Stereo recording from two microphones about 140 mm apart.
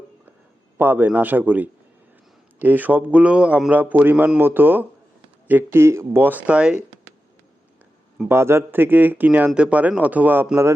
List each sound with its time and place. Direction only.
0.8 s a man's voice: 15° right (ahead or behind)
8.3 s a man's voice: 15° right (ahead or behind)